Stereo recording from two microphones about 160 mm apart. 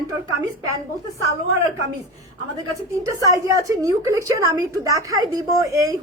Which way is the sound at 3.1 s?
20° right (ahead or behind).